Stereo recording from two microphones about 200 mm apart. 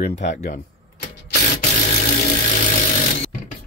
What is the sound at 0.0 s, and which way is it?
Speech, 35° left (ahead or behind).